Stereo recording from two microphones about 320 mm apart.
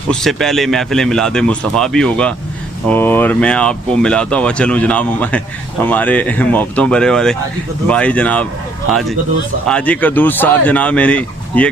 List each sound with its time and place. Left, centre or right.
0.1 s speech: centre
9.7 s speech: centre